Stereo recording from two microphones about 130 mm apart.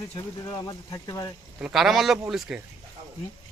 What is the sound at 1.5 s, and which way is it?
A man's voice, 5° right (ahead or behind).